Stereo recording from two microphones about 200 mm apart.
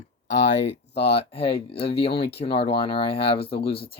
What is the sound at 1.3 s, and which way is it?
Speech, 30° left (ahead or behind).